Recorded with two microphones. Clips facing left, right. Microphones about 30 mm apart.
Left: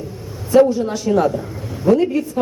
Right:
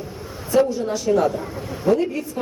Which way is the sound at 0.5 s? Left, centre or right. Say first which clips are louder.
Left 6 dB; centre.